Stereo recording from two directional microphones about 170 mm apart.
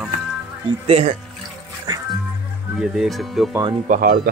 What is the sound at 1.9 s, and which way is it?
Music, 25° right (ahead or behind).